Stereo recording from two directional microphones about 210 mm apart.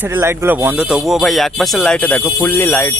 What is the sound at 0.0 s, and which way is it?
Speech, 10° right (ahead or behind).